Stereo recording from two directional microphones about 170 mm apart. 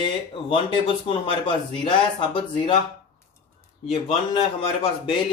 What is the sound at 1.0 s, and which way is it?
Speech, 30° left (ahead or behind).